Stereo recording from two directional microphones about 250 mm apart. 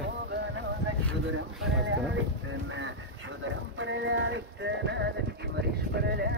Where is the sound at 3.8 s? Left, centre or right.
Right.